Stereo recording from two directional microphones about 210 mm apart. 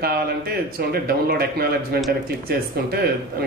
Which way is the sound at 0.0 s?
50° right (ahead or behind).